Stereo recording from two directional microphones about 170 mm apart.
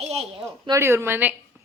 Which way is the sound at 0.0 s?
35° right (ahead or behind).